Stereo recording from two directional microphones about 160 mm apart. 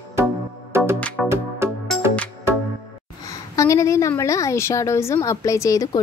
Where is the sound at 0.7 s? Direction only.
15° right (ahead or behind).